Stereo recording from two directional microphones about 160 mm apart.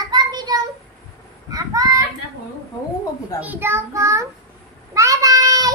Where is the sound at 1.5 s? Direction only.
20° right (ahead or behind).